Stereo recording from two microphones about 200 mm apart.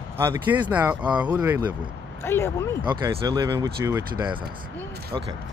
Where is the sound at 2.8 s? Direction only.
20° right (ahead or behind).